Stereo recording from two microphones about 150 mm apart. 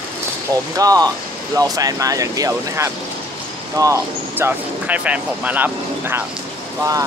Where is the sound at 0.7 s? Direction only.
25° right (ahead or behind).